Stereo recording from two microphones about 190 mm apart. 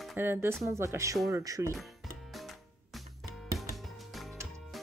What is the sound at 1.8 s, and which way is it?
Music, centre (ahead or behind).